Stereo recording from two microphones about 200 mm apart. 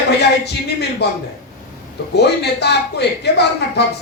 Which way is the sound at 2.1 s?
55° left (ahead or behind).